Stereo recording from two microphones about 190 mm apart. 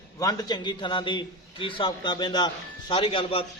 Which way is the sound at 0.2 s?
20° left (ahead or behind).